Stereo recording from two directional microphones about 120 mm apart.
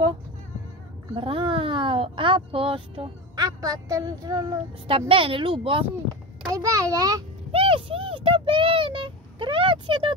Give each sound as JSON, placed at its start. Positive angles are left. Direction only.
{"t": 1.1, "sound": "speech", "side_deg": -45}
{"t": 3.3, "sound": "a woman's voice", "side_deg": -30}
{"t": 4.8, "sound": "speech", "side_deg": -50}
{"t": 6.5, "sound": "a child's voice", "side_deg": -25}
{"t": 7.5, "sound": "speech", "side_deg": -50}